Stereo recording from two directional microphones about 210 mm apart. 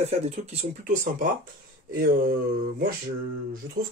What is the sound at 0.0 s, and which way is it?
Speech, 30° right (ahead or behind).